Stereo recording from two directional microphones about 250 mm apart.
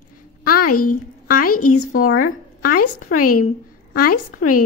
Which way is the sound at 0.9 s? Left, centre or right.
Left.